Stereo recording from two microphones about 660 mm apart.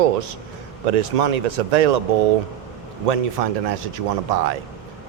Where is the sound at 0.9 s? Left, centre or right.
Right.